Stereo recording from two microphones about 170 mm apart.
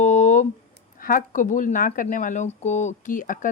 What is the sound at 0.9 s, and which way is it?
Speech, 55° left (ahead or behind).